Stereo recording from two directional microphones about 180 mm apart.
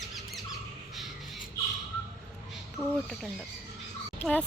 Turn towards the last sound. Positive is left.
turn(degrees=5)  # may be behind; listen again after turning